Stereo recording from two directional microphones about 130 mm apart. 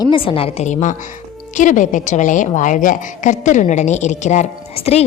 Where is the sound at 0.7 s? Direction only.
65° left (ahead or behind).